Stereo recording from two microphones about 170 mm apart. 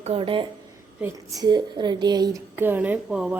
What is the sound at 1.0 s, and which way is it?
A woman's voice, 20° right (ahead or behind).